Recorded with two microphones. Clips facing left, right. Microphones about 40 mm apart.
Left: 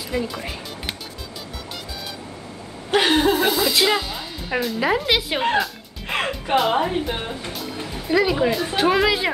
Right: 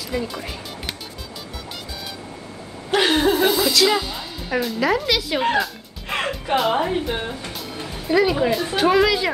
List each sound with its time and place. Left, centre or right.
0.1 s speech: centre
2.9 s chuckle: centre
3.9 s speech: centre
4.7 s a woman's voice: centre
5.6 s speech: centre